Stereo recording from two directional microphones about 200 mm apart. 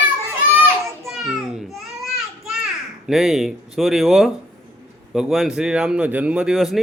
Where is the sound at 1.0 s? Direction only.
Centre (ahead or behind).